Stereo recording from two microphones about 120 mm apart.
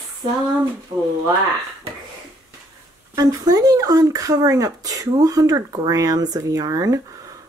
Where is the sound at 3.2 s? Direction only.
30° right (ahead or behind).